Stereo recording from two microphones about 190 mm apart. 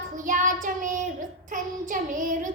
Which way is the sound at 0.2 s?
45° right (ahead or behind).